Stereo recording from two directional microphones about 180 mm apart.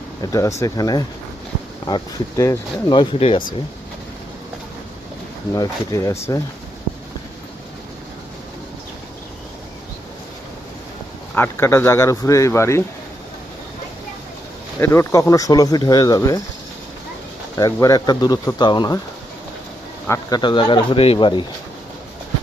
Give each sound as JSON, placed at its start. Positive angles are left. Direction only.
{"t": 0.2, "sound": "speech", "side_deg": 20}
{"t": 5.5, "sound": "speech", "side_deg": 15}
{"t": 11.3, "sound": "speech", "side_deg": 10}
{"t": 14.8, "sound": "speech", "side_deg": 15}
{"t": 17.6, "sound": "speech", "side_deg": 20}
{"t": 20.1, "sound": "speech", "side_deg": 25}